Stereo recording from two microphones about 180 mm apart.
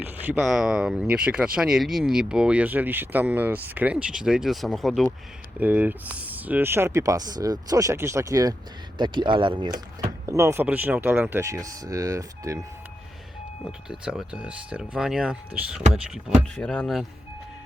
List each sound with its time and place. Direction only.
0.0 s speech: 10° right (ahead or behind)
13.7 s speech: 5° right (ahead or behind)